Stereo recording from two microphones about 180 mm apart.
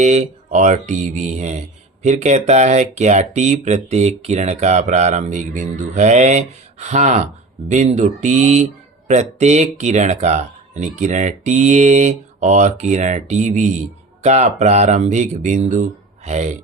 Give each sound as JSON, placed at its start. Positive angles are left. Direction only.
{"t": 0.0, "sound": "speech", "side_deg": -40}